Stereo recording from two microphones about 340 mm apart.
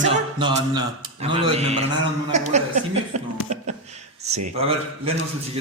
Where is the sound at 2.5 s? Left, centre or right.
Centre.